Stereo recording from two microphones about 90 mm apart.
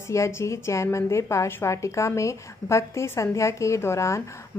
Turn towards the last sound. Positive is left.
turn(degrees=35)  # may be behind; listen again after turning